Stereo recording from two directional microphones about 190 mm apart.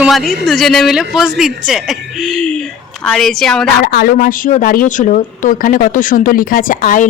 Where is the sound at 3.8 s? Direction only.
55° left (ahead or behind).